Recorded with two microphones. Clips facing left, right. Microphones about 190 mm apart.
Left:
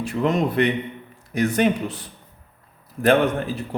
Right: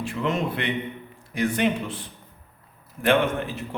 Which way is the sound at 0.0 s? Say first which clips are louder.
Left 5 dB; 40° left (ahead or behind).